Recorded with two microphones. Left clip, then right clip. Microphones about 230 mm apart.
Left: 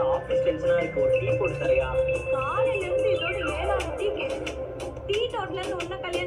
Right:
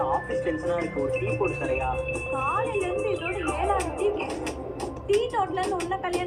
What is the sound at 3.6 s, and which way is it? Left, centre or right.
Music, right.